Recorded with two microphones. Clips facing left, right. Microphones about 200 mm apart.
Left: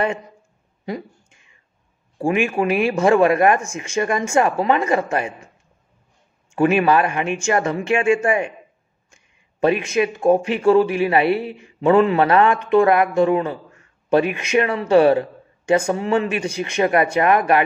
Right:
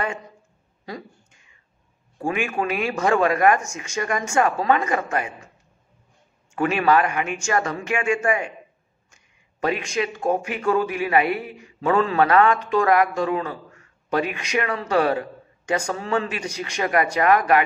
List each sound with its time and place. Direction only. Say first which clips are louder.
0.8 s a sound: left 7 dB; 25° left (ahead or behind)
2.1 s speech: left 5 dB; 25° left (ahead or behind)
6.5 s speech: left 4 dB; 25° left (ahead or behind)